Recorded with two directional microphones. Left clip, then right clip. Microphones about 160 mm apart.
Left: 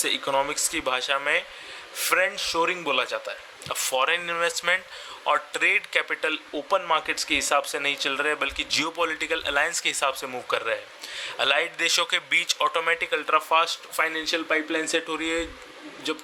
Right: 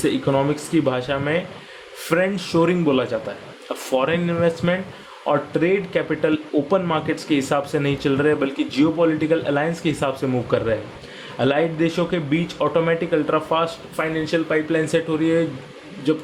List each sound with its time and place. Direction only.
0.0 s speech: 25° left (ahead or behind)
2.8 s speech: 35° left (ahead or behind)